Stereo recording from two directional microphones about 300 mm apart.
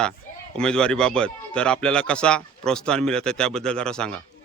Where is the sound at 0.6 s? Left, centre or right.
Centre.